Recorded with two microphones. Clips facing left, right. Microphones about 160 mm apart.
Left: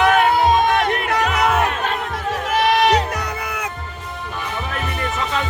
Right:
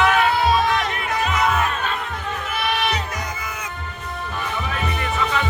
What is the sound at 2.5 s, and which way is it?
Crowd, 90° left.